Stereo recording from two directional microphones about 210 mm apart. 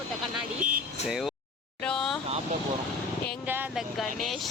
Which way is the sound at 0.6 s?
40° right (ahead or behind).